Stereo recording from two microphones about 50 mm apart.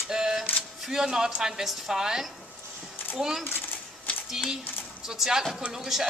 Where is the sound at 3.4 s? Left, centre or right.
Left.